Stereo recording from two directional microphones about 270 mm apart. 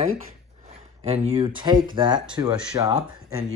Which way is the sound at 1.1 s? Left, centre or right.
Right.